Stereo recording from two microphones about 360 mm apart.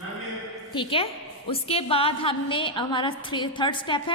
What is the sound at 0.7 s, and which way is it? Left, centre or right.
A woman's voice, centre.